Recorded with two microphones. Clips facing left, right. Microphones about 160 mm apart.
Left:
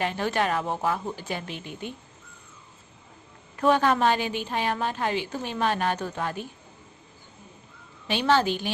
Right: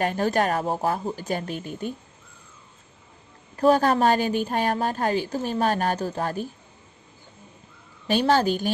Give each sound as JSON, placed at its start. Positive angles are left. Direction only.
{"t": 0.0, "sound": "a woman's voice", "side_deg": -45}
{"t": 3.5, "sound": "a woman's voice", "side_deg": -40}
{"t": 8.1, "sound": "a woman's voice", "side_deg": -40}